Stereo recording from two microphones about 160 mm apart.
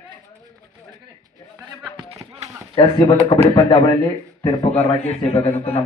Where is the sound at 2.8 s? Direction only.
30° left (ahead or behind).